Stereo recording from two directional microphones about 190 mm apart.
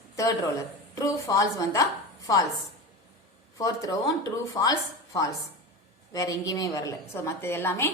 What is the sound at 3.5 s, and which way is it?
A woman's voice, 20° left (ahead or behind).